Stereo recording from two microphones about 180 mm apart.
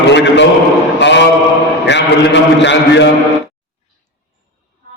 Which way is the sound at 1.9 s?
75° left (ahead or behind).